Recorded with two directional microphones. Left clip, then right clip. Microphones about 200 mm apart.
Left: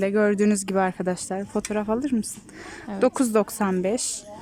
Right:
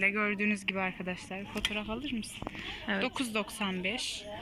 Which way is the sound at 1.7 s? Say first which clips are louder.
Left 11 dB; 60° left (ahead or behind).